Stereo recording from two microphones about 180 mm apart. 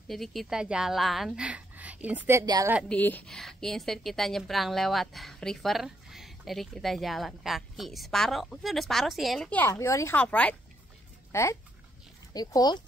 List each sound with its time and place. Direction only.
0.1 s a woman's voice: centre (ahead or behind); by 2.7 s 20° right (ahead or behind)
2.9 s a woman's voice: 10° left (ahead or behind)